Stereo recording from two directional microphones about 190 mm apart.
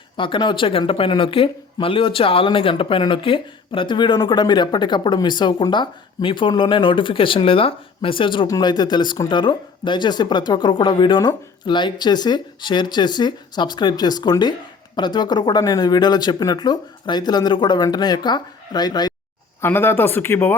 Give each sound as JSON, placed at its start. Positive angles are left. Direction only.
{"t": 0.2, "sound": "speech", "side_deg": 25}